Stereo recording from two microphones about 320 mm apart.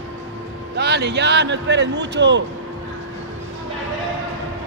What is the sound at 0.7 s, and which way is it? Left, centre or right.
Speech, right.